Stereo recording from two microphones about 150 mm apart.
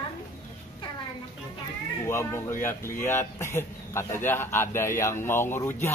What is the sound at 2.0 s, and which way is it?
A man's voice, 15° left (ahead or behind).